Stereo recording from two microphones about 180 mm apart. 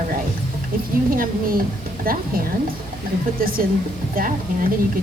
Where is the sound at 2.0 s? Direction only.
55° right (ahead or behind).